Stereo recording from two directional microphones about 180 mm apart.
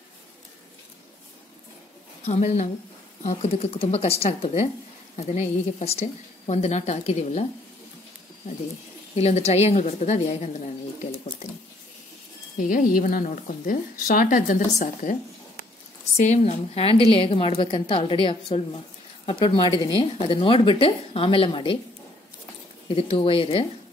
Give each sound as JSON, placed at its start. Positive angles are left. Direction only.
{"t": 2.2, "sound": "a woman's voice", "side_deg": 35}
{"t": 9.1, "sound": "a woman's voice", "side_deg": 35}
{"t": 11.4, "sound": "water", "side_deg": 40}
{"t": 12.5, "sound": "a woman's voice", "side_deg": 50}
{"t": 16.2, "sound": "a woman's voice", "side_deg": 40}
{"t": 22.8, "sound": "a woman's voice", "side_deg": 30}